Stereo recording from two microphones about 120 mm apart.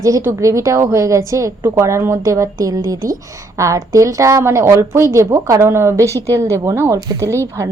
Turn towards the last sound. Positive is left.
turn(degrees=-25)  # may be behind; listen again after turning